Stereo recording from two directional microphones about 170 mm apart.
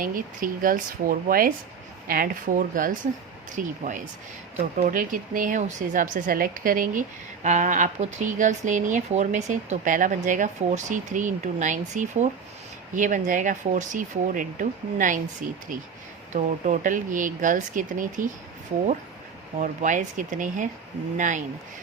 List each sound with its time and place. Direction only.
0.0 s speech: 55° right (ahead or behind)
19.5 s speech: 45° right (ahead or behind)